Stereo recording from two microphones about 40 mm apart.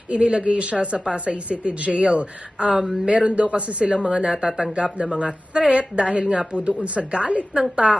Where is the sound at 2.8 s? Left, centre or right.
Centre.